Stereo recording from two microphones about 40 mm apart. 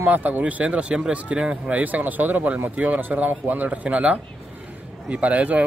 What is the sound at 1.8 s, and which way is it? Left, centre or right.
Speech, right.